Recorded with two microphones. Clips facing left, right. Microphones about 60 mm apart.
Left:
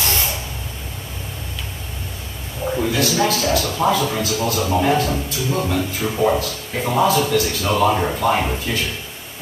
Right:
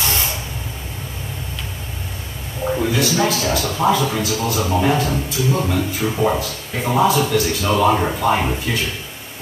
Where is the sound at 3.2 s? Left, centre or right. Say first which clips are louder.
Even; centre.